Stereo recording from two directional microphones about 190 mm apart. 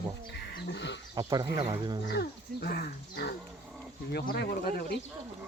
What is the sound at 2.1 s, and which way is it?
Speech, 60° left (ahead or behind).